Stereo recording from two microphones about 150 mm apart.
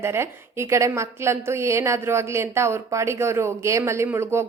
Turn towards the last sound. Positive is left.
turn(degrees=-15)  # may be behind; listen again after turning